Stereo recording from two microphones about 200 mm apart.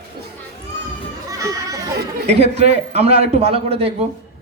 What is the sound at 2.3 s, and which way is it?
A man's voice, 35° right (ahead or behind).